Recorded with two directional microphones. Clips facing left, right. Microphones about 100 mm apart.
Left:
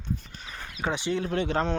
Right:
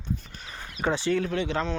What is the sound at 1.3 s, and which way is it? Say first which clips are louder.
Speech: left 1 dB; 45° left (ahead or behind).